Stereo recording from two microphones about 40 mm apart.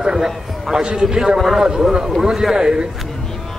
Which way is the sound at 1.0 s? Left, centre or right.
Centre.